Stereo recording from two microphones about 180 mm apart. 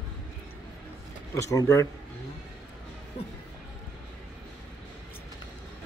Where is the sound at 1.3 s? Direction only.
20° left (ahead or behind).